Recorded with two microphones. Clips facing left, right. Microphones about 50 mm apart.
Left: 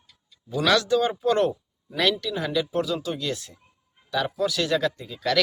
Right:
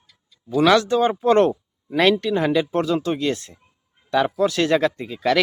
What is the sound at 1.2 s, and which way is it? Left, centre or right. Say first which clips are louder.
Speech: right 6 dB; right.